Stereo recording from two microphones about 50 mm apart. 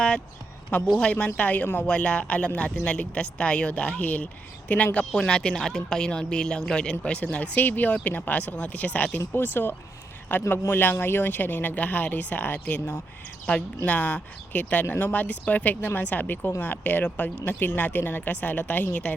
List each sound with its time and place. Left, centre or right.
1.0 s speech: left
1.8 s speech: left
5.1 s speech: centre
9.3 s speech: left